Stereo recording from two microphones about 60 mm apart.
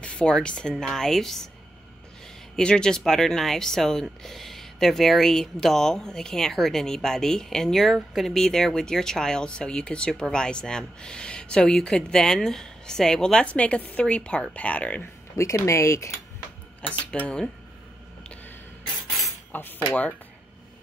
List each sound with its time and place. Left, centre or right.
0.0 s speech: centre
2.5 s speech: centre
15.0 s speech: left
17.0 s speech: centre
19.5 s speech: left